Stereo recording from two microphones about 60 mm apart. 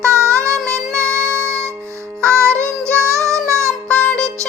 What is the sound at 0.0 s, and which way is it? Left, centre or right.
Music, right.